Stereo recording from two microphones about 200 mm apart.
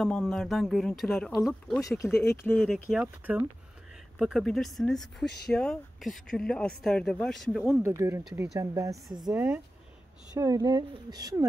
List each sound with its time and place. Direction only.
0.0 s speech: centre (ahead or behind)
3.0 s speech: 10° right (ahead or behind)
7.8 s speech: 15° right (ahead or behind)